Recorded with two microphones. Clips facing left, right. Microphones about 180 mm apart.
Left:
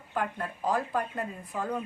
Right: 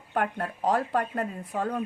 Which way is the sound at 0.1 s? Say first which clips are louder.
Right 4 dB; 55° right (ahead or behind).